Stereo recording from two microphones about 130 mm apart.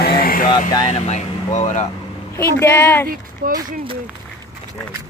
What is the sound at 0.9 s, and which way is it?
Speech, 60° left (ahead or behind).